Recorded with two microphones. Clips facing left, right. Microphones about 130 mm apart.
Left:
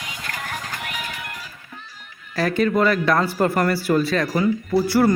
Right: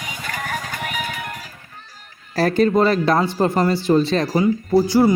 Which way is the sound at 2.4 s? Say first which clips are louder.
Right 3 dB; 35° right (ahead or behind).